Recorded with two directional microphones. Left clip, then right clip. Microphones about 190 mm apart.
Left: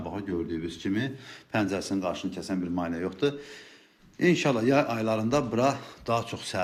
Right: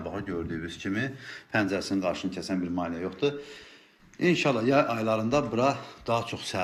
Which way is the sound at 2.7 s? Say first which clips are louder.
Left 1 dB; 15° left (ahead or behind).